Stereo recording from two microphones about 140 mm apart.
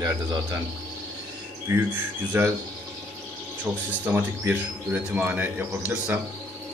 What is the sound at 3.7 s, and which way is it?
Speech, 10° right (ahead or behind).